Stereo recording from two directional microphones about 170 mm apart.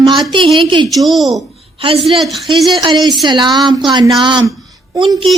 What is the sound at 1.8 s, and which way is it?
Speech, 30° right (ahead or behind).